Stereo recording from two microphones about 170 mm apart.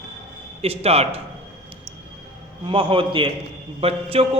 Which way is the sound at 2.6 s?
30° right (ahead or behind).